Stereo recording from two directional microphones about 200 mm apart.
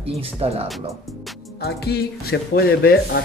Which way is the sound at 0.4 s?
30° right (ahead or behind).